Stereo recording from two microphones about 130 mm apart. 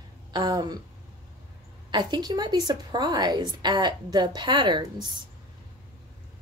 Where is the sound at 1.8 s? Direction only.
35° right (ahead or behind).